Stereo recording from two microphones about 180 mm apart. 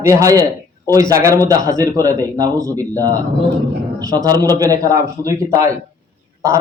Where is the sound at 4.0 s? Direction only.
20° right (ahead or behind).